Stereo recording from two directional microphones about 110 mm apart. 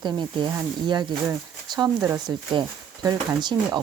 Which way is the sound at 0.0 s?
45° right (ahead or behind).